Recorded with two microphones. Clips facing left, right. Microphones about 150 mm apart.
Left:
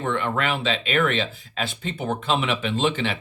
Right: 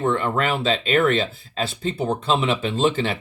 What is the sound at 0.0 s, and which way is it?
Speech, 40° right (ahead or behind).